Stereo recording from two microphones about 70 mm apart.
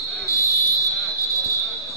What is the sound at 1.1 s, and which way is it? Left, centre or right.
Basketball bounce, left.